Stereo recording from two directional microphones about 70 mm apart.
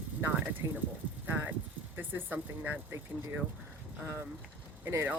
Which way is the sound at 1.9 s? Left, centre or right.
Right.